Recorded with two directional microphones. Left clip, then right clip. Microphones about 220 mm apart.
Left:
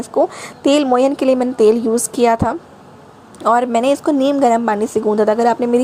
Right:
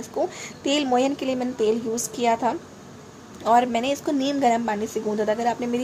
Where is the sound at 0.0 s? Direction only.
25° left (ahead or behind).